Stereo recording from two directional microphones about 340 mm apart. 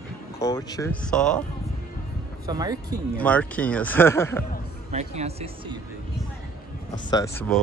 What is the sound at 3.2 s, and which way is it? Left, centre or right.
Speech, centre.